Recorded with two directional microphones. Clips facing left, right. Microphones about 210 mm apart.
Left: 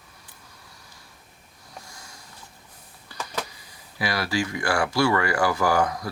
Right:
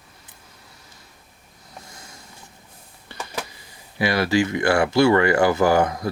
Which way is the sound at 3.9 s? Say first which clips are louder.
Right 6 dB; 25° right (ahead or behind).